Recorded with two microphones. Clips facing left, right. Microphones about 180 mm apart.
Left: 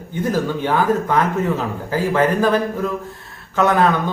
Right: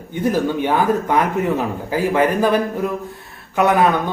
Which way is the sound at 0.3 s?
15° right (ahead or behind).